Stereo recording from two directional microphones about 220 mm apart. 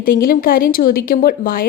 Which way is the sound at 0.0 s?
40° left (ahead or behind).